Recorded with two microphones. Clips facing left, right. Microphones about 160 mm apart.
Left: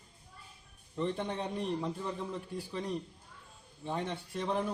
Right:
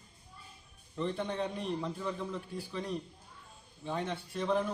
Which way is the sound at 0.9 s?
15° left (ahead or behind).